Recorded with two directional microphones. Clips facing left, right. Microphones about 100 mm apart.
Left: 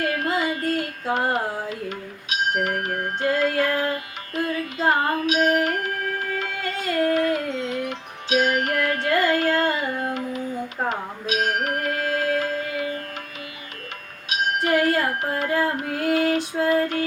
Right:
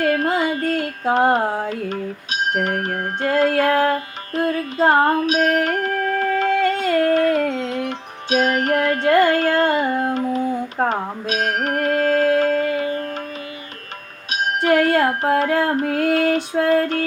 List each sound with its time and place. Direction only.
0.0 s music: 45° right (ahead or behind)
1.9 s music: 40° right (ahead or behind)
3.8 s carnatic music: 45° right (ahead or behind)
7.5 s music: 40° right (ahead or behind)
14.3 s music: 40° right (ahead or behind)
15.2 s female singing: 45° right (ahead or behind)